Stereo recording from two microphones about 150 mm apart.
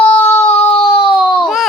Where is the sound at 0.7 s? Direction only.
35° left (ahead or behind).